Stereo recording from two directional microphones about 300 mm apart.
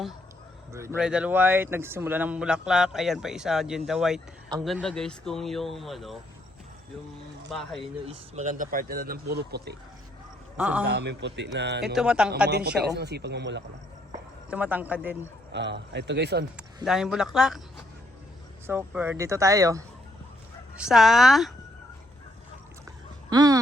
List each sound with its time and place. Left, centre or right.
0.7 s speech: centre
7.5 s speech: centre
8.0 s speech: right
10.6 s speech: centre
10.8 s a man's voice: right
11.9 s speech: centre
12.5 s a man's voice: right
14.5 s speech: centre
15.5 s a man's voice: right
16.8 s speech: centre
18.6 s speech: centre
23.3 s speech: centre